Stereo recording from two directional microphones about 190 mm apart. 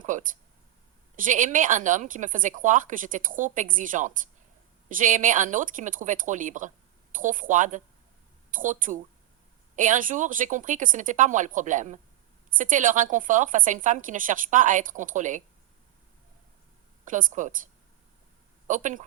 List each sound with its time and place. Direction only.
0.0 s a sound: 45° right (ahead or behind)
1.1 s a woman's voice: 45° right (ahead or behind)
17.1 s a woman's voice: 45° right (ahead or behind)
18.7 s a woman's voice: 40° right (ahead or behind)